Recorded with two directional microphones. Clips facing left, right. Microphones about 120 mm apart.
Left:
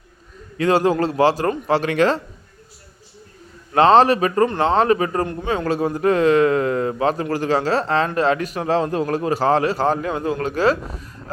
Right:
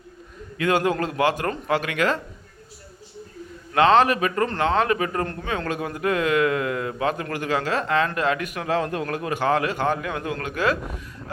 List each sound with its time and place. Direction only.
0.5 s a man's voice: 35° left (ahead or behind)
3.8 s a man's voice: 35° left (ahead or behind)